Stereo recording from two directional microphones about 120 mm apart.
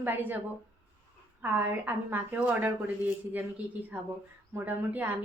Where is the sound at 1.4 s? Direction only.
15° right (ahead or behind).